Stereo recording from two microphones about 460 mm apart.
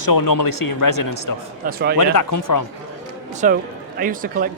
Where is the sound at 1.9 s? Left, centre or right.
Left.